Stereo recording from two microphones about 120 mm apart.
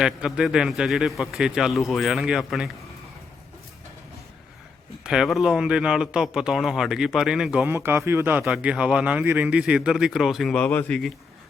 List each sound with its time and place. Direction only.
0.0 s a man's voice: 5° right (ahead or behind)
5.0 s a man's voice: 5° right (ahead or behind)
7.7 s a man's voice: 20° right (ahead or behind); by 10.6 s centre (ahead or behind)
10.6 s a man's voice: 10° left (ahead or behind)